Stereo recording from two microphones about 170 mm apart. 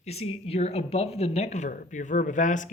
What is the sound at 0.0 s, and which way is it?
Speech, 35° left (ahead or behind).